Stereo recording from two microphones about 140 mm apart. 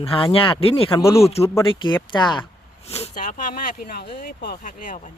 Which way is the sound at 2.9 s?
45° left (ahead or behind).